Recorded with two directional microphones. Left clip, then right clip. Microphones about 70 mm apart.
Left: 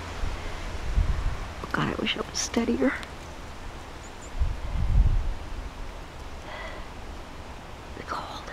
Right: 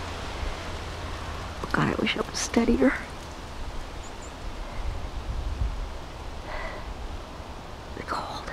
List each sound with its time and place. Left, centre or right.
1.6 s speech: right
8.1 s whispering: right